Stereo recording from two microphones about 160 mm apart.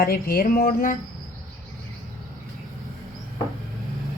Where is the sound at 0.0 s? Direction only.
65° left (ahead or behind).